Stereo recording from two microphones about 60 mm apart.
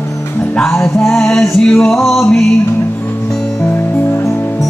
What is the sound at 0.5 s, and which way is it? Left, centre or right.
Music, centre.